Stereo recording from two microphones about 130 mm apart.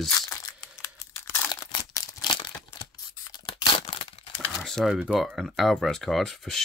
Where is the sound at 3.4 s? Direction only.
45° left (ahead or behind).